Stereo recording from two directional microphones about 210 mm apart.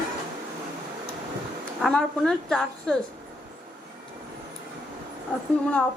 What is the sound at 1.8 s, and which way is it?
A woman's voice, 5° left (ahead or behind).